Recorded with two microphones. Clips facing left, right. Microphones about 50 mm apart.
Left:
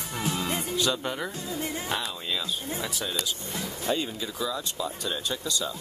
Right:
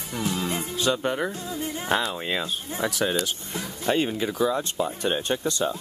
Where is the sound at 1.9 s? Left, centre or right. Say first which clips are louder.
Right 6 dB; right.